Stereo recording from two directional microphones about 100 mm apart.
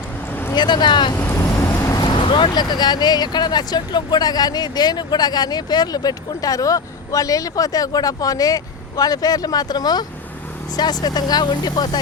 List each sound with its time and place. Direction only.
0.5 s speech: 50° left (ahead or behind)
1.1 s vehicle: 25° left (ahead or behind)
1.8 s speech: 40° left (ahead or behind)